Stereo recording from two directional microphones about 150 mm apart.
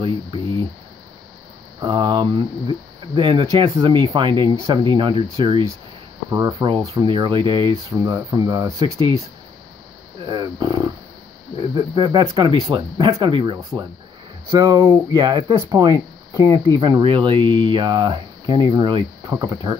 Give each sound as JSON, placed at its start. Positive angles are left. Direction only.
{"t": 1.8, "sound": "a sound", "side_deg": -30}
{"t": 3.2, "sound": "speech", "side_deg": -35}
{"t": 10.2, "sound": "speech", "side_deg": -30}